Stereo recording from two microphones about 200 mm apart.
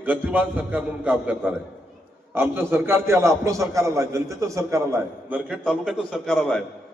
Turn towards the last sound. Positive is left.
turn(degrees=5)  # may be behind; listen again after turning